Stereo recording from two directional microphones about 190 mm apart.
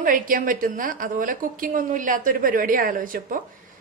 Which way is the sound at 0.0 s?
45° right (ahead or behind).